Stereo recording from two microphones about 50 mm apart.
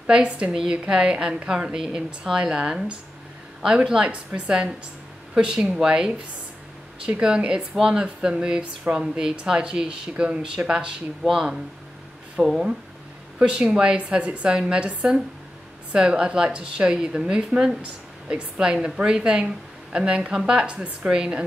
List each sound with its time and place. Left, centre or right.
0.0 s a woman's voice: right